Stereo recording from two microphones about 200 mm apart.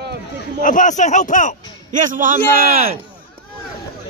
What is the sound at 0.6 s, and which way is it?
Speech, 40° left (ahead or behind).